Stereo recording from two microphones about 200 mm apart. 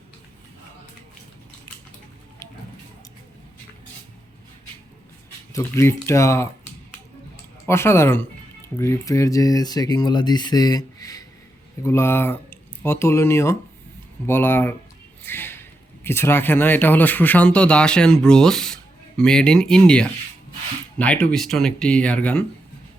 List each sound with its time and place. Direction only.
5.5 s speech: 15° left (ahead or behind)
7.7 s speech: 10° left (ahead or behind)
15.2 s a sound: 10° left (ahead or behind)
16.0 s speech: 10° left (ahead or behind)